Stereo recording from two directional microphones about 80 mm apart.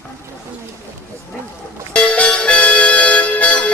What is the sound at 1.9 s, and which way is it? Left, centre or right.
Music, centre.